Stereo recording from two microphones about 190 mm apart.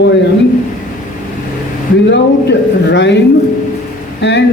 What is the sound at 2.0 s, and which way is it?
Speech, 65° left (ahead or behind).